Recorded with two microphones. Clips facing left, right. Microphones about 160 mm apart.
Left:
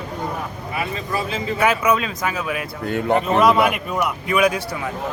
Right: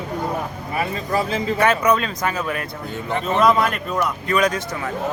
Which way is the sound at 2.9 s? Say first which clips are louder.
Left 8 dB; 65° left (ahead or behind).